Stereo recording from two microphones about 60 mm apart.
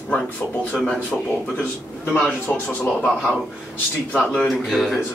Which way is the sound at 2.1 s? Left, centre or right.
Left.